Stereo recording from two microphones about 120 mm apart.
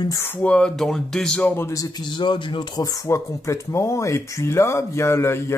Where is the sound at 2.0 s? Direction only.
40° left (ahead or behind).